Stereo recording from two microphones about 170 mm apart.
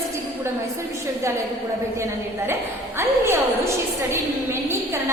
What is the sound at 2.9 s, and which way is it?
Speech, 15° right (ahead or behind).